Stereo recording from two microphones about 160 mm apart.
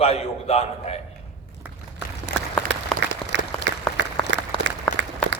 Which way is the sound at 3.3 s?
90° right.